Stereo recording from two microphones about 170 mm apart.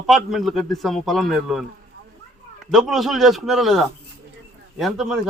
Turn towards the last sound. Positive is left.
turn(degrees=0)  # may be behind; listen again after turning